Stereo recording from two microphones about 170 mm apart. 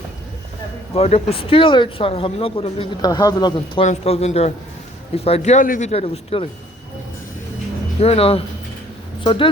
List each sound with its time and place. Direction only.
0.9 s speech: 35° left (ahead or behind)
3.8 s speech: 40° left (ahead or behind)
5.9 s speech: 35° left (ahead or behind)
8.0 s speech: 35° left (ahead or behind)